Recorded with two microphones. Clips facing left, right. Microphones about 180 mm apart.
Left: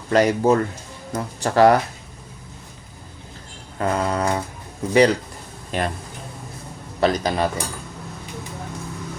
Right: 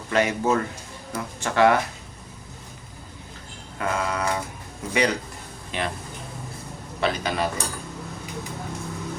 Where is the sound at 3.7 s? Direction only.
35° left (ahead or behind).